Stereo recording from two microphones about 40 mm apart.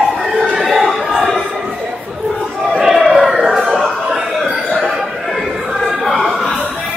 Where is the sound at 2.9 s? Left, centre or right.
Centre.